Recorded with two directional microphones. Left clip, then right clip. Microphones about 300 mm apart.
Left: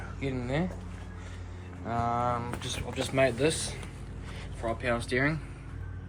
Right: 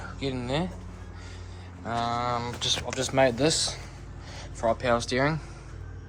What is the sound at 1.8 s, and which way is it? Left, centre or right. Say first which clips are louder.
Speech: right 1 dB; centre.